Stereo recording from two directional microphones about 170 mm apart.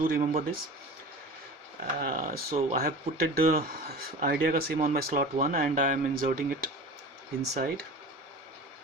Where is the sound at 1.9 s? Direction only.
55° right (ahead or behind).